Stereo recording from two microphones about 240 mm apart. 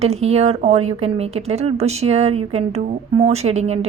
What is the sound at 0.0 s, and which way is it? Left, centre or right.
A woman's voice, right.